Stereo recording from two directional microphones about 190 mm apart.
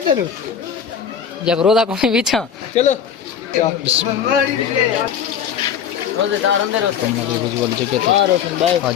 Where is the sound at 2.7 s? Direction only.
35° left (ahead or behind).